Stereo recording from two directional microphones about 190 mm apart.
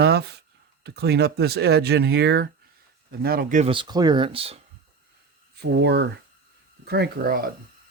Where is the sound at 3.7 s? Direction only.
25° right (ahead or behind).